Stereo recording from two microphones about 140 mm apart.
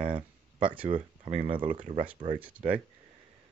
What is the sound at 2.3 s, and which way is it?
Speech, 10° right (ahead or behind).